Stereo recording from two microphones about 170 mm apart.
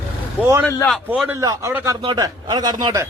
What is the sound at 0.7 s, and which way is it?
Speech, 15° left (ahead or behind).